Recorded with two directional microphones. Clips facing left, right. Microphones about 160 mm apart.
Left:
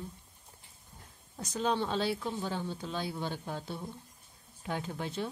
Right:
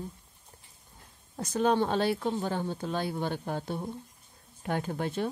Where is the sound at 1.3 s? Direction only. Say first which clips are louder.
Right 6 dB; 55° right (ahead or behind).